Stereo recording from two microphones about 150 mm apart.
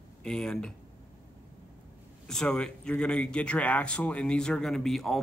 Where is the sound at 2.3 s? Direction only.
5° left (ahead or behind).